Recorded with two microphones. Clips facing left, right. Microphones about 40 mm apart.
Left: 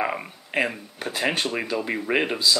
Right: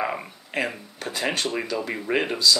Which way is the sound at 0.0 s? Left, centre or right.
Centre.